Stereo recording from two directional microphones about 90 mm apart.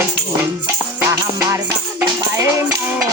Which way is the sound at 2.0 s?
30° right (ahead or behind).